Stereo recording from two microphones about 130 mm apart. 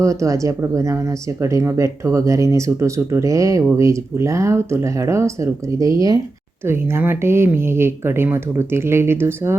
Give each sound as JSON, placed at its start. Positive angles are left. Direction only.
{"t": 0.0, "sound": "speech", "side_deg": -25}